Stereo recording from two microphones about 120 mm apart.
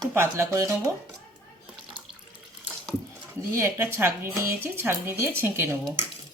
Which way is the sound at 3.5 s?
20° right (ahead or behind).